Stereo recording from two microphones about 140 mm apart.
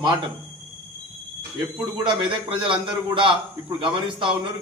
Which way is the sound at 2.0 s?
35° right (ahead or behind).